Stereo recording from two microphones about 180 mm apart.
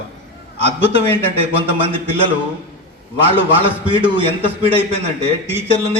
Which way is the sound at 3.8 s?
30° right (ahead or behind).